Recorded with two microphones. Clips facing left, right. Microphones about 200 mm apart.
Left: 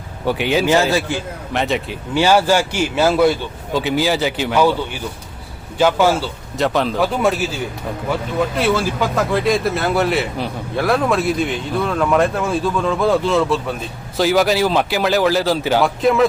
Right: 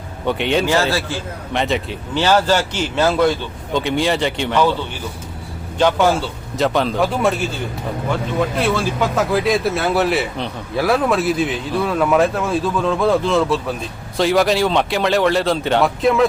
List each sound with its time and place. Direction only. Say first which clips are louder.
0.3 s speech: even; 5° left (ahead or behind)
0.6 s speech: left 2 dB; 15° left (ahead or behind)
1.5 s speech: even; centre (ahead or behind)
5.7 s speech: left 1 dB; 5° left (ahead or behind)